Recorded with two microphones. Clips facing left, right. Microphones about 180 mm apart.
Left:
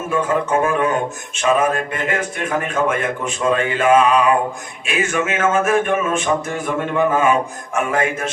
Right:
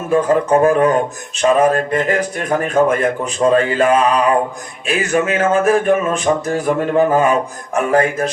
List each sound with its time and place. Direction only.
0.1 s speech: 35° right (ahead or behind)